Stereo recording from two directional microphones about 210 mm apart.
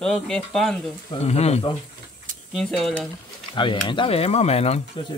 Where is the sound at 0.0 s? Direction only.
Centre (ahead or behind).